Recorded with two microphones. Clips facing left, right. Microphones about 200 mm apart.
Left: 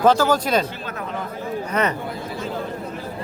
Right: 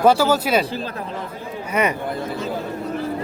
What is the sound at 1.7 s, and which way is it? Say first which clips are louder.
Speech: right 2 dB; 10° right (ahead or behind).